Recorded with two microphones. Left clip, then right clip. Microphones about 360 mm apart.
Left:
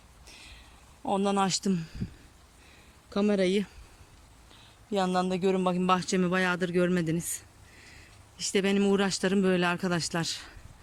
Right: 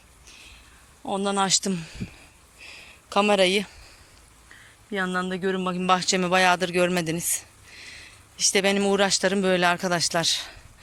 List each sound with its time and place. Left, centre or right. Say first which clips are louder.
1.0 s a man's voice: right 3 dB; centre
3.2 s a man's voice: right 7 dB; centre
4.9 s a man's voice: right 1 dB; centre